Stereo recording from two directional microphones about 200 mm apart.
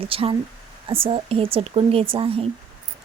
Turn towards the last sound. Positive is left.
turn(degrees=-30)  # may be behind; listen again after turning